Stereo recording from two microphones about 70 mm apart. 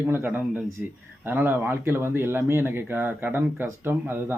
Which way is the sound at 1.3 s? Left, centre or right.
Right.